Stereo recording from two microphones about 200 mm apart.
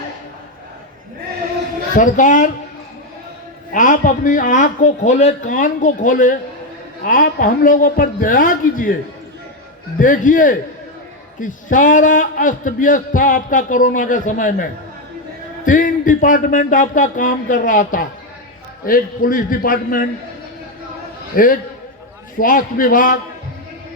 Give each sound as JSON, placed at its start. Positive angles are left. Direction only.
{"t": 2.0, "sound": "a man's voice", "side_deg": 40}
{"t": 3.7, "sound": "a man's voice", "side_deg": 40}
{"t": 10.0, "sound": "a man's voice", "side_deg": 40}
{"t": 21.3, "sound": "a man's voice", "side_deg": 45}